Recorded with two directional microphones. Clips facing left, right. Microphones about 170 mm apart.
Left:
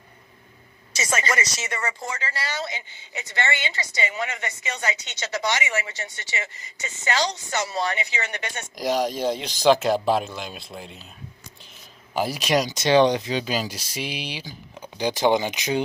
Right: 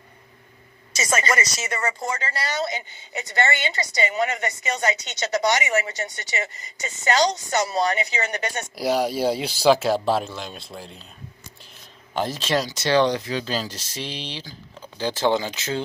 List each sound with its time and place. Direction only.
1.1 s speech: 40° right (ahead or behind)
8.7 s speech: 10° right (ahead or behind)
12.1 s speech: 10° left (ahead or behind)